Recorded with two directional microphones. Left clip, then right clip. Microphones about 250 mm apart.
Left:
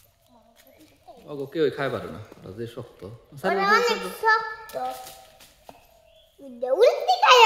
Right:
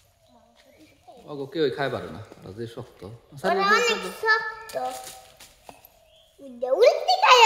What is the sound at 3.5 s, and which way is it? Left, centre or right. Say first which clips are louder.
A child's voice: even; centre.